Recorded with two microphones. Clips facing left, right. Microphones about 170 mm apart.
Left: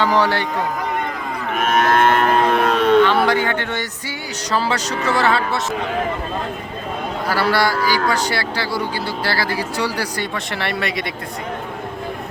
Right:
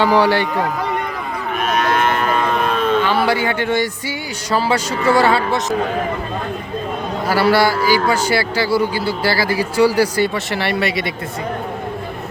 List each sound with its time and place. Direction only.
0.0 s a man's voice: 15° right (ahead or behind)
1.7 s cattle: 55° left (ahead or behind); by 2.9 s 75° left (ahead or behind)
3.2 s a man's voice: 10° right (ahead or behind)
5.0 s a man's voice: 10° right (ahead or behind)
7.3 s a man's voice: 10° right (ahead or behind)